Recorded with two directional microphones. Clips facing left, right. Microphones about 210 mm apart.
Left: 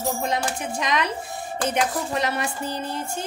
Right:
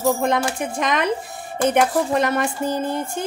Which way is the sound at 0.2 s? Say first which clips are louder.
Right 5 dB; 55° right (ahead or behind).